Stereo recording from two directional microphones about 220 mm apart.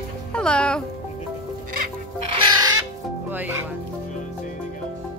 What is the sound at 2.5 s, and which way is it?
Music, 15° right (ahead or behind).